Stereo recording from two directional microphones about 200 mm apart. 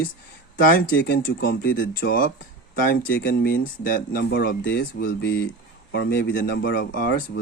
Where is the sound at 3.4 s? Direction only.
45° left (ahead or behind).